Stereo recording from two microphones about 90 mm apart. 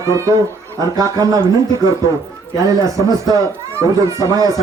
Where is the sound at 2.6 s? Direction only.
40° right (ahead or behind).